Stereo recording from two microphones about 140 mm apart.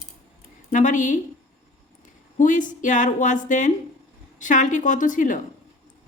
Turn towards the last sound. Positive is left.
turn(degrees=65)  # may be behind; listen again after turning